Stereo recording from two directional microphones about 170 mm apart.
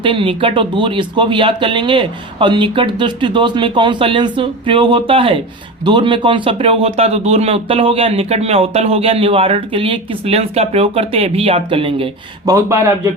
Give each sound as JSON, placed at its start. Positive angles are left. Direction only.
{"t": 0.0, "sound": "speech", "side_deg": -30}
{"t": 12.5, "sound": "speech", "side_deg": -20}